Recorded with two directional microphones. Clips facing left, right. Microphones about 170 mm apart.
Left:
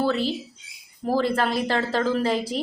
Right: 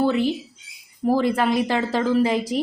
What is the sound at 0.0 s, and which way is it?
A woman's voice, 15° right (ahead or behind).